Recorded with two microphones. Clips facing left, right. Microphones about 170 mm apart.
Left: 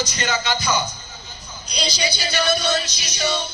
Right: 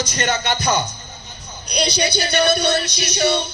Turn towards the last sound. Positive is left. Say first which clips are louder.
# right 6 dB
turn(degrees=-65)  # may be behind; listen again after turning